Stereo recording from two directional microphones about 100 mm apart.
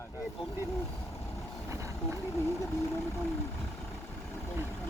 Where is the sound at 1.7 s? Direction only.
30° right (ahead or behind).